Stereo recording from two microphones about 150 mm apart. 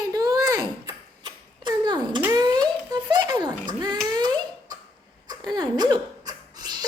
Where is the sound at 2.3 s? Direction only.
25° right (ahead or behind).